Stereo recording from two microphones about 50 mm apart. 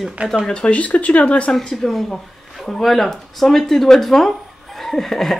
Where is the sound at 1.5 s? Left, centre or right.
Centre.